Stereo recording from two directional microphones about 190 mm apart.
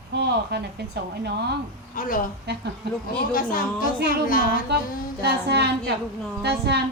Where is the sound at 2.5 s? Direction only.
60° right (ahead or behind).